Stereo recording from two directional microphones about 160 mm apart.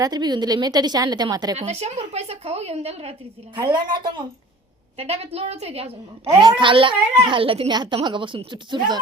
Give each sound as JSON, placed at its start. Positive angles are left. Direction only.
{"t": 0.0, "sound": "a woman's voice", "side_deg": -25}
{"t": 1.5, "sound": "a child's voice", "side_deg": -45}
{"t": 3.9, "sound": "a woman's voice", "side_deg": -30}
{"t": 4.9, "sound": "a child's voice", "side_deg": -40}